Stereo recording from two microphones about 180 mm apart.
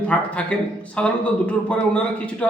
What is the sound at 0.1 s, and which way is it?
A man's voice, 5° left (ahead or behind).